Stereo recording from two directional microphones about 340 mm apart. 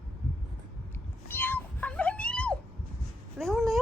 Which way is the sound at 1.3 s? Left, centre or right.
Centre.